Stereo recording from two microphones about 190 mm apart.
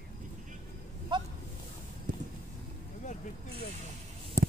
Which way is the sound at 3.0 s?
40° left (ahead or behind).